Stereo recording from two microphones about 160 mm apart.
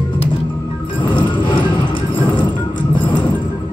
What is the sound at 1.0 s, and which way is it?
Music, 30° left (ahead or behind).